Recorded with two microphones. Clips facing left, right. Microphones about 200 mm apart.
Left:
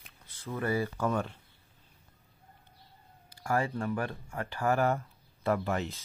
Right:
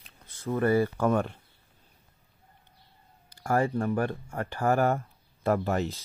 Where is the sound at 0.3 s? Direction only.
50° right (ahead or behind).